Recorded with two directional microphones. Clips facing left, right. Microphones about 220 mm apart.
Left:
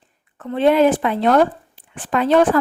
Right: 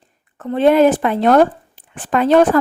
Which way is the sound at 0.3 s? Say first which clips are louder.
Right 3 dB; 45° right (ahead or behind).